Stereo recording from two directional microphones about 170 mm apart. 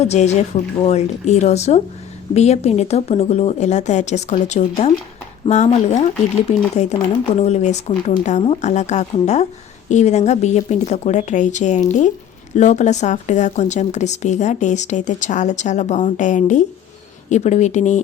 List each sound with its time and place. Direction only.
0.0 s speech: 40° left (ahead or behind)